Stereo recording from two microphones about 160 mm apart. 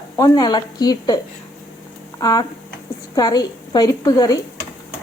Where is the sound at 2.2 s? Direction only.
25° left (ahead or behind).